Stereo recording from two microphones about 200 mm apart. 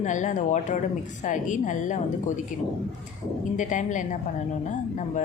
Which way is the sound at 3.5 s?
40° left (ahead or behind).